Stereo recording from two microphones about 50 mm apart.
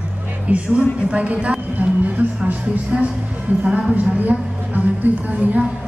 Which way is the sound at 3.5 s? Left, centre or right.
Right.